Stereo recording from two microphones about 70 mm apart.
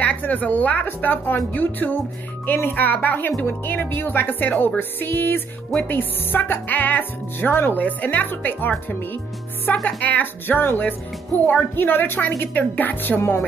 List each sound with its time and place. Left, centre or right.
0.0 s speech: left